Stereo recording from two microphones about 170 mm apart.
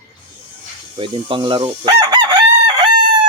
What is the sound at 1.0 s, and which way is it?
Chicken, 30° right (ahead or behind).